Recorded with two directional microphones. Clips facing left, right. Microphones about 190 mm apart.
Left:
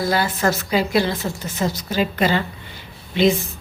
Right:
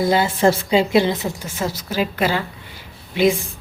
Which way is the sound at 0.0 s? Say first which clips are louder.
Right 4 dB; 25° right (ahead or behind).